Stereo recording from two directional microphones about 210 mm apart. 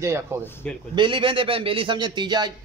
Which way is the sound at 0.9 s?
20° right (ahead or behind).